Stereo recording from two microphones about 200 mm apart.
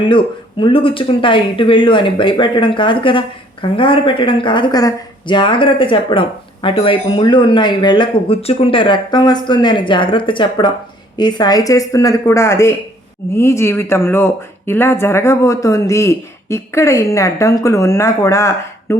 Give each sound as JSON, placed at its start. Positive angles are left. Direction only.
{"t": 0.0, "sound": "speech", "side_deg": 25}